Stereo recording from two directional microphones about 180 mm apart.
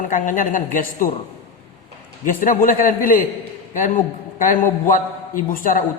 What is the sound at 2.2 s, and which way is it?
Speech, 50° left (ahead or behind).